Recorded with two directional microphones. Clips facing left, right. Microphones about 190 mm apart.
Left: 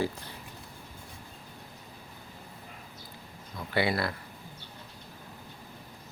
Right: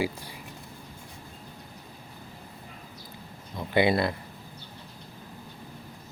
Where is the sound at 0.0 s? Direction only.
10° right (ahead or behind).